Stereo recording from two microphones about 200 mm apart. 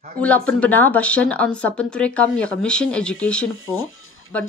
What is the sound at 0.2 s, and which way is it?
Speech, 5° left (ahead or behind).